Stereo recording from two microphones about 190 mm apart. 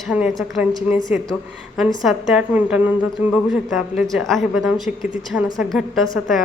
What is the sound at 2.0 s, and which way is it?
A woman's voice, centre (ahead or behind).